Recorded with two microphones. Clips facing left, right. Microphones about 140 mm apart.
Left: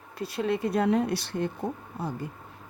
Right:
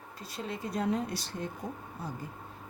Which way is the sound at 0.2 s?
65° left (ahead or behind).